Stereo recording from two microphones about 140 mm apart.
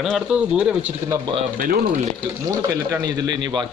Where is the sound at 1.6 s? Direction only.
80° right.